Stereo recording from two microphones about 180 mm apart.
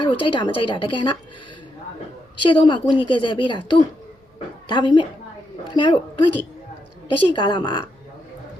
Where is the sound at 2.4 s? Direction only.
25° left (ahead or behind).